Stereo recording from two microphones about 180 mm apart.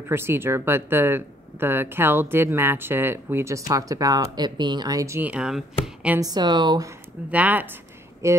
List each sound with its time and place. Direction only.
0.1 s speech: 15° right (ahead or behind)
6.0 s speech: 15° right (ahead or behind)
7.2 s speech: 10° right (ahead or behind)